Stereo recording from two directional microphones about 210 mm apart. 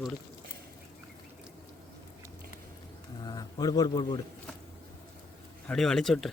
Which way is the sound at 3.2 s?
20° left (ahead or behind).